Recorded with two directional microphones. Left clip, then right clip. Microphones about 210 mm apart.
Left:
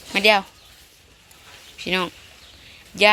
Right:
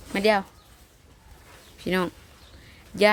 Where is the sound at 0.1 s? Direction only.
10° right (ahead or behind).